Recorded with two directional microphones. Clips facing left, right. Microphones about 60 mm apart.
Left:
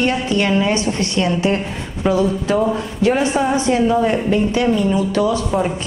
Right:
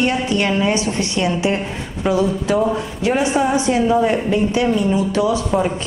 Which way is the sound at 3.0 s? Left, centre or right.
Centre.